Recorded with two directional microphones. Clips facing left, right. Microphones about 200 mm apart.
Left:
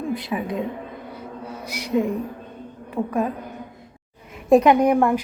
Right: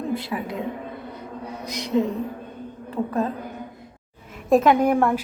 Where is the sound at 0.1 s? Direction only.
20° left (ahead or behind).